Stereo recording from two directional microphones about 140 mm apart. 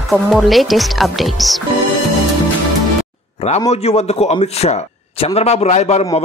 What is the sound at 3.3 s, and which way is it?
A man's voice, 50° left (ahead or behind).